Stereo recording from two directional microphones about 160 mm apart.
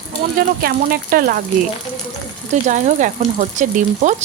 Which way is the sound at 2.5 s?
50° right (ahead or behind).